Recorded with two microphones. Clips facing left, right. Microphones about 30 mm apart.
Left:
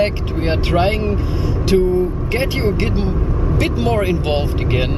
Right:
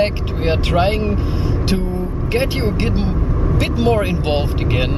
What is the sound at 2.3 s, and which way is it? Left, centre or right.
Speech, centre.